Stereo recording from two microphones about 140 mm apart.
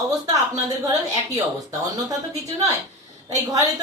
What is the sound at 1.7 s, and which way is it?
Speech, 25° right (ahead or behind).